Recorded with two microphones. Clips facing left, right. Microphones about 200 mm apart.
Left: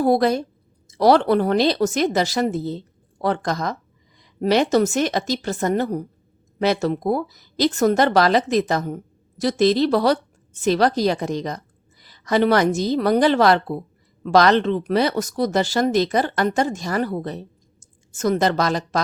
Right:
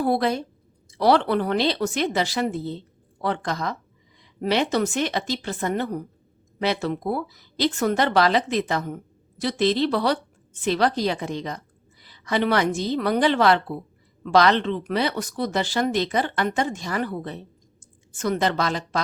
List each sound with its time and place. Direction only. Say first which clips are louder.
0.0 s a woman's voice: left 5 dB; 40° left (ahead or behind)